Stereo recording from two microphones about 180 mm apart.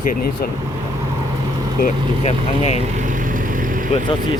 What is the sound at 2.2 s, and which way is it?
Speech, 35° left (ahead or behind).